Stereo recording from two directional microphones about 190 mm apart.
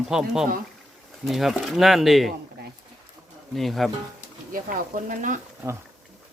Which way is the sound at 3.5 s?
Centre (ahead or behind).